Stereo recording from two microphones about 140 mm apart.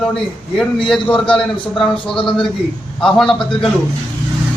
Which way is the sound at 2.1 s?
35° left (ahead or behind).